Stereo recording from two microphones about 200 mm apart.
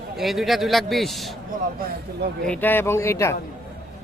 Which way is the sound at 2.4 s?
10° left (ahead or behind).